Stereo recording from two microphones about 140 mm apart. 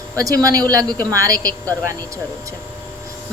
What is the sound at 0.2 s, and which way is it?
A woman's voice, 25° right (ahead or behind).